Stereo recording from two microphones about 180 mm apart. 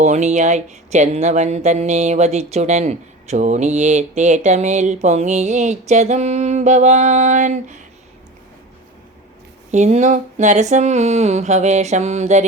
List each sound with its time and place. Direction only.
0.0 s speech: 40° right (ahead or behind)
9.7 s speech: 40° right (ahead or behind)